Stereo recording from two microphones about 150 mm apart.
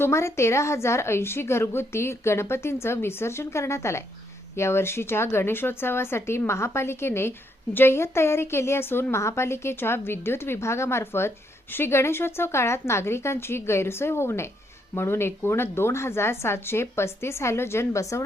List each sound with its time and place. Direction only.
0.0 s speech: 20° left (ahead or behind)